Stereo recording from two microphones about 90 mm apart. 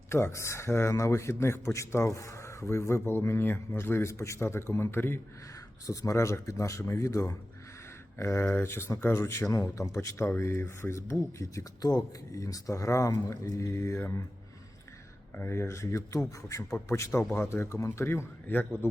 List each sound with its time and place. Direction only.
0.1 s a man's voice: 30° left (ahead or behind)
5.8 s a man's voice: 40° left (ahead or behind)
15.4 s a man's voice: 30° left (ahead or behind)